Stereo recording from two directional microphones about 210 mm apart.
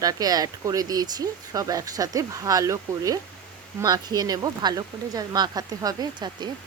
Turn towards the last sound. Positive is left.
turn(degrees=-20)  # may be behind; listen again after turning